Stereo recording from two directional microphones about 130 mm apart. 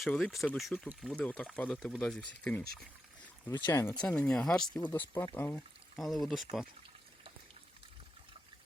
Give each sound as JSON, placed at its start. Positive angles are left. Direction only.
{"t": 0.0, "sound": "speech", "side_deg": 0}
{"t": 3.7, "sound": "speech", "side_deg": 20}
{"t": 4.0, "sound": "speech", "side_deg": 10}
{"t": 4.9, "sound": "speech", "side_deg": 20}
{"t": 5.5, "sound": "speech", "side_deg": 0}